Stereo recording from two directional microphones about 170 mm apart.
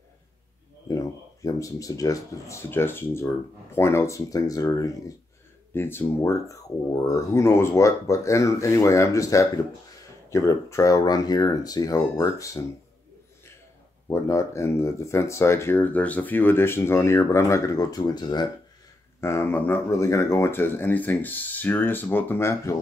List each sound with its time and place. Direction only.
0.8 s speech: 20° left (ahead or behind)
14.0 s speech: 20° left (ahead or behind)
19.2 s speech: 15° left (ahead or behind)